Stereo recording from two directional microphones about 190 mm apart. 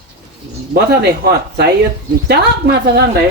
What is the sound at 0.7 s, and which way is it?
Speech, 55° right (ahead or behind).